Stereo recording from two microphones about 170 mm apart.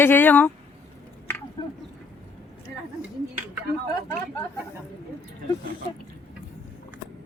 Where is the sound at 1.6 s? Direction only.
25° left (ahead or behind).